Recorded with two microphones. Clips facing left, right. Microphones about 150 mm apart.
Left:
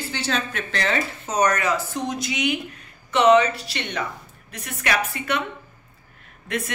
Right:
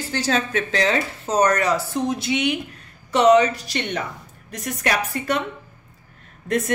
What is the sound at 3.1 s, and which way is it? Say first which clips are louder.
Speech: right 1 dB; 40° right (ahead or behind).